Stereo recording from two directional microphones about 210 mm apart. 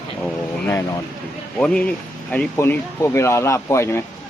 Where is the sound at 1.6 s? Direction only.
5° left (ahead or behind).